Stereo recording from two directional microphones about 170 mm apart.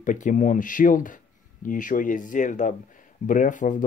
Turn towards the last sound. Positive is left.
turn(degrees=50)  # may be behind; listen again after turning